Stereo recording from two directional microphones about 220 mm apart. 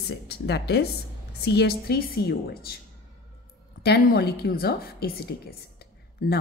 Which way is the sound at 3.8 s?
45° left (ahead or behind).